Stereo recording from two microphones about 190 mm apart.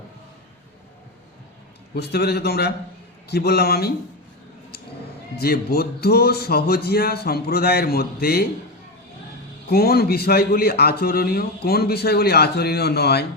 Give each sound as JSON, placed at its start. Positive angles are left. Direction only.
{"t": 2.0, "sound": "a man's voice", "side_deg": 55}
{"t": 5.4, "sound": "a man's voice", "side_deg": 55}
{"t": 9.6, "sound": "a man's voice", "side_deg": 55}